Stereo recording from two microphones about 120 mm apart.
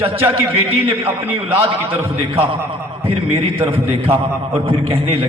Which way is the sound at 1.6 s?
50° right (ahead or behind).